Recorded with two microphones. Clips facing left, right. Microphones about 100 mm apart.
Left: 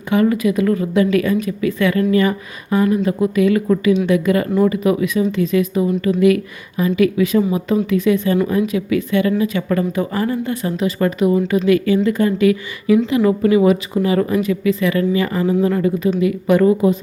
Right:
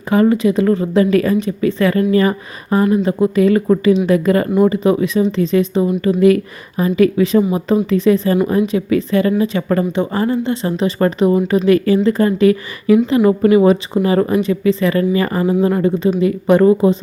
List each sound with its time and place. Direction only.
0.1 s a woman's voice: 30° right (ahead or behind)